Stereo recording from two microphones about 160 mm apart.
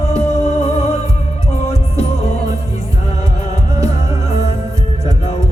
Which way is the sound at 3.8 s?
40° left (ahead or behind).